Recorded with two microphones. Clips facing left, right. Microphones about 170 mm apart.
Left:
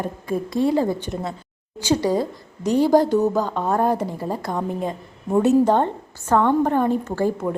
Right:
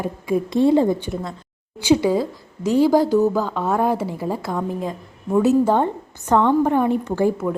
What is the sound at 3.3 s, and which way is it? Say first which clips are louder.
Speech: even; 15° left (ahead or behind).